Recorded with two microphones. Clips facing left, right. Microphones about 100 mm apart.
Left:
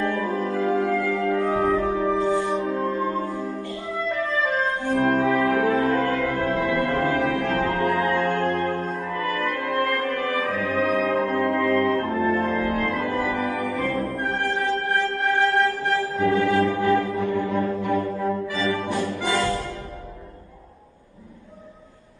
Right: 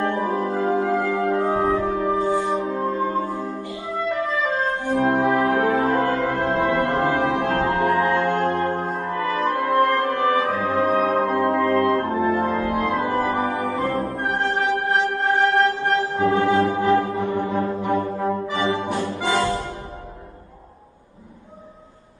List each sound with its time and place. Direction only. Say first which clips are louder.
0.0 s music: right 2 dB; 20° right (ahead or behind)